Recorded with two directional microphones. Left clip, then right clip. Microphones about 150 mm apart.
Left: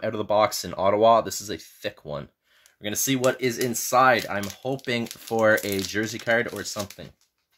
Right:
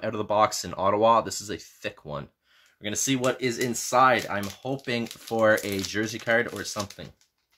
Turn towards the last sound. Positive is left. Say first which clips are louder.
# left 1 dB
turn(degrees=25)  # may be behind; listen again after turning